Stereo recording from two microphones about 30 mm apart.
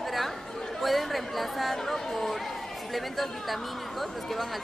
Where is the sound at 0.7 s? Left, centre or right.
Centre.